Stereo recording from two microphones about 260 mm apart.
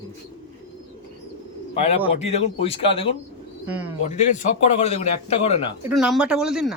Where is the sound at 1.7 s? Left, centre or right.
Left.